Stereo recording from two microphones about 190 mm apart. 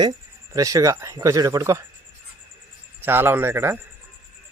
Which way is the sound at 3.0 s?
10° right (ahead or behind).